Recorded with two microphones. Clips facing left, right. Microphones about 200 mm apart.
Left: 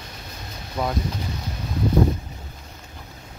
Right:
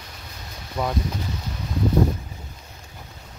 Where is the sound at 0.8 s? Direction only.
5° left (ahead or behind).